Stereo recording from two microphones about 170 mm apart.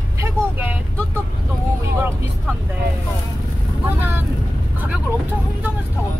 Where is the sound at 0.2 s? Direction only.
10° right (ahead or behind).